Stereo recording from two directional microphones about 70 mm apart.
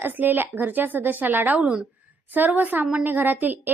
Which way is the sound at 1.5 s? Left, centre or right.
Centre.